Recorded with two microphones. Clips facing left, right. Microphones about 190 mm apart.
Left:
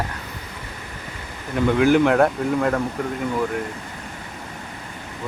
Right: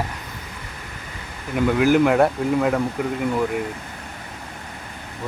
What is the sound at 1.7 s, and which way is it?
Speech, 5° right (ahead or behind).